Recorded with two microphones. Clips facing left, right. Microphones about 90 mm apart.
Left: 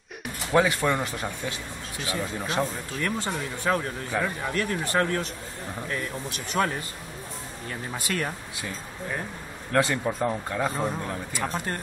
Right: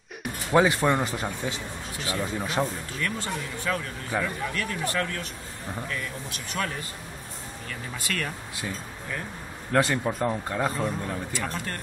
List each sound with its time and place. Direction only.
0.2 s speech: 10° right (ahead or behind)
2.4 s speech: 10° right (ahead or behind)
3.0 s speech: 30° left (ahead or behind)
4.1 s speech: 5° right (ahead or behind)
4.5 s speech: 35° left (ahead or behind)
6.5 s speech: 40° left (ahead or behind)
7.9 s speech: 25° left (ahead or behind)
9.7 s speech: centre (ahead or behind)
10.8 s a man's voice: 10° left (ahead or behind)
11.3 s speech: 20° left (ahead or behind)